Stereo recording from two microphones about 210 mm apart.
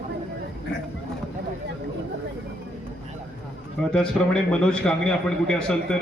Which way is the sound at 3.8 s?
5° left (ahead or behind).